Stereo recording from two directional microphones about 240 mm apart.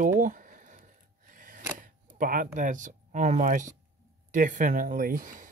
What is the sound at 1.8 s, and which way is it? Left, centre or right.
Speech, right.